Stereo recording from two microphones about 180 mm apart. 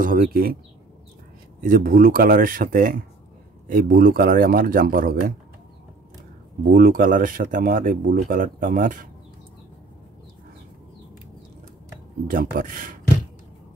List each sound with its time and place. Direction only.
0.0 s speech: 50° right (ahead or behind)
1.6 s speech: 50° right (ahead or behind)
6.7 s speech: 55° right (ahead or behind)
12.3 s speech: 50° right (ahead or behind)